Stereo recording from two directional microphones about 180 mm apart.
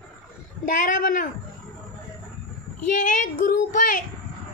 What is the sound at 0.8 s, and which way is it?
Speech, 45° left (ahead or behind).